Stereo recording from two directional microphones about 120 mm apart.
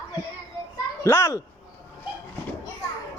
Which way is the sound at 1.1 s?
20° left (ahead or behind).